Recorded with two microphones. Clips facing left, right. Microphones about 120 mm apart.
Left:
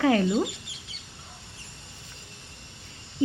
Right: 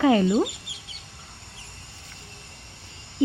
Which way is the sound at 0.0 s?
5° right (ahead or behind).